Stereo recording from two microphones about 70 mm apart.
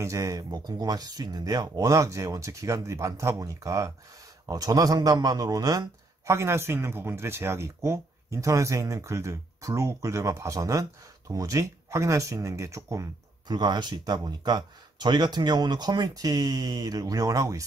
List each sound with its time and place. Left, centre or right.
0.0 s a man's voice: right
6.2 s speech: right
13.5 s speech: right